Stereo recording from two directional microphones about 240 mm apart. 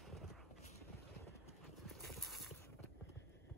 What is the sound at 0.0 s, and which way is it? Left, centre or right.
Clip-clop, centre.